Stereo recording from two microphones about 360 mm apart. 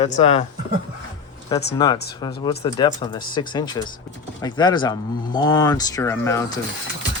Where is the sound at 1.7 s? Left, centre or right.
Centre.